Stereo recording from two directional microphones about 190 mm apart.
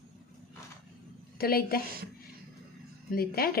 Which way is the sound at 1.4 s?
50° left (ahead or behind).